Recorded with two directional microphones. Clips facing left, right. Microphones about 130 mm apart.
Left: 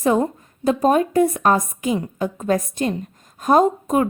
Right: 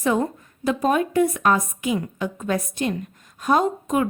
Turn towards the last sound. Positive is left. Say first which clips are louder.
# left 4 dB
turn(degrees=40)  # may be behind; listen again after turning